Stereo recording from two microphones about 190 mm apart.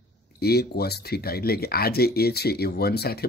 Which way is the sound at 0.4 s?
55° left (ahead or behind).